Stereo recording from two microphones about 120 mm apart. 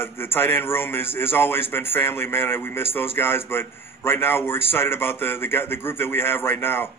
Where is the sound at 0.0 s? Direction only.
20° left (ahead or behind).